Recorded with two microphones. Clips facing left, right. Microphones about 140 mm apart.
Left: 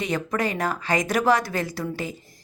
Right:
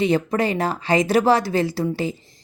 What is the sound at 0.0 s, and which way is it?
A woman's voice, 30° right (ahead or behind).